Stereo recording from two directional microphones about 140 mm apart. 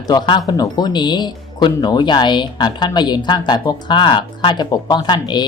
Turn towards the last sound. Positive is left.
turn(degrees=30)  # may be behind; listen again after turning